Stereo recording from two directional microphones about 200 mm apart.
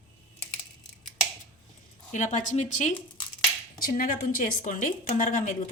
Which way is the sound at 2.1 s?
40° left (ahead or behind).